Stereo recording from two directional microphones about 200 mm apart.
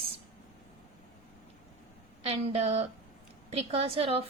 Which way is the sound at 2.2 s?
30° right (ahead or behind).